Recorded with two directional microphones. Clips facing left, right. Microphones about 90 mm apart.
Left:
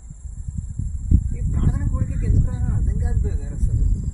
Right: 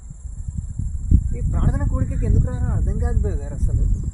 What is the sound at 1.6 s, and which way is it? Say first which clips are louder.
Speech: right 1 dB; 50° right (ahead or behind).